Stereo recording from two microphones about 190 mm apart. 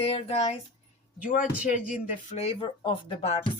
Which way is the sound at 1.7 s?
40° left (ahead or behind).